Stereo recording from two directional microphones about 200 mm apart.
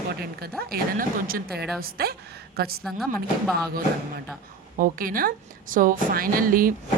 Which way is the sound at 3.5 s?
50° right (ahead or behind).